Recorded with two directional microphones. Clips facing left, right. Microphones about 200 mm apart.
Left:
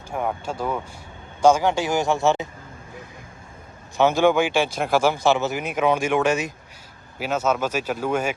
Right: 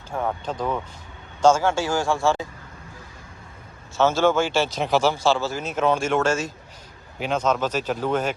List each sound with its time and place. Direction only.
0.1 s speech: 10° left (ahead or behind)
3.9 s speech: 15° left (ahead or behind)
7.2 s speech: 5° left (ahead or behind)